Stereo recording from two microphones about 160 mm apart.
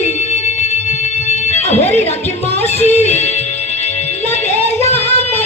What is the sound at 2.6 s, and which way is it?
Music, 40° left (ahead or behind).